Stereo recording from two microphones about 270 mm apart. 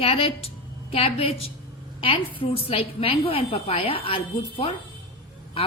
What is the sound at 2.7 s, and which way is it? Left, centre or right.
A woman's voice, left.